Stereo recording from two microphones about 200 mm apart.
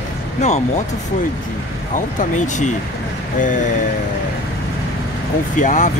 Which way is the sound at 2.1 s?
40° left (ahead or behind).